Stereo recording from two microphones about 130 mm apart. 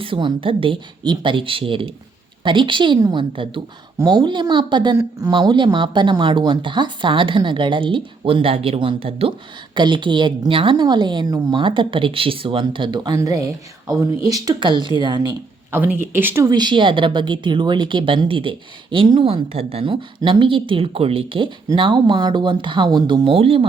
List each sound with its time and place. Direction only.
0.0 s a woman's voice: 40° right (ahead or behind)
15.9 s speech: 15° right (ahead or behind)
16.5 s speech: 35° right (ahead or behind)